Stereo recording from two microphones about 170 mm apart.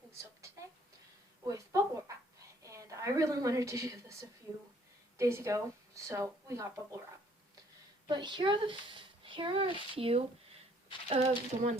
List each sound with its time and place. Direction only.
0.2 s a sound: 15° right (ahead or behind)
2.6 s a woman's voice: 20° right (ahead or behind)
8.0 s speech: 25° right (ahead or behind)